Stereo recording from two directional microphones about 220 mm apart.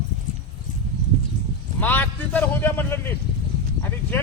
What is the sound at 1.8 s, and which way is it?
A man's voice, 5° left (ahead or behind).